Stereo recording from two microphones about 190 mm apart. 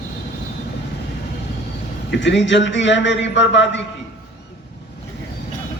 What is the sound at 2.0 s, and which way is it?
A man's voice, 70° left (ahead or behind).